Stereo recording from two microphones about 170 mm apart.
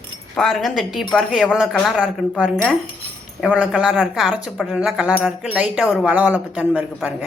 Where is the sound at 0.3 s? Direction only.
Centre (ahead or behind).